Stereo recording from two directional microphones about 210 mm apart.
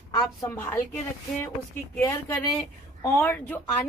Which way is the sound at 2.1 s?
10° left (ahead or behind).